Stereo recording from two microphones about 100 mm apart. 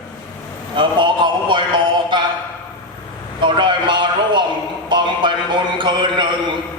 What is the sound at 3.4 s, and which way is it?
A man's voice, 55° right (ahead or behind).